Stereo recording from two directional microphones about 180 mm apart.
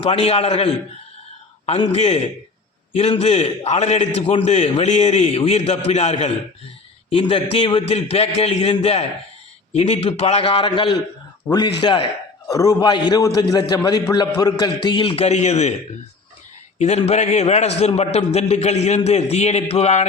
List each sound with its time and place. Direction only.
0.1 s a man's voice: 35° left (ahead or behind)
16.7 s a man's voice: 40° left (ahead or behind)